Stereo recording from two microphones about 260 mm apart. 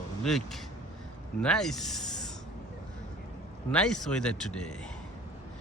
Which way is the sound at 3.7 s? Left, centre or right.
Centre.